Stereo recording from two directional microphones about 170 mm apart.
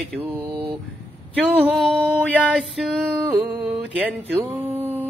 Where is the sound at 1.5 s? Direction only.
5° right (ahead or behind).